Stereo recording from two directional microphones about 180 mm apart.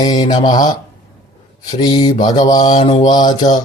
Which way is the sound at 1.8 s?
25° left (ahead or behind).